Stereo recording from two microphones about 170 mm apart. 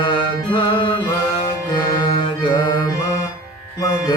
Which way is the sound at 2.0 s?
30° left (ahead or behind).